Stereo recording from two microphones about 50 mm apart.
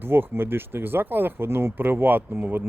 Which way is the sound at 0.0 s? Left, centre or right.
Right.